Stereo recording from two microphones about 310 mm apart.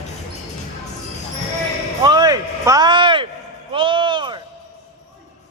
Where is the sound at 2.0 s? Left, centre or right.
Centre.